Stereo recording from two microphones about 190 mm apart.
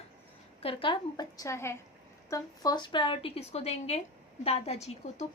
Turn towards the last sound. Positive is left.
turn(degrees=35)  # may be behind; listen again after turning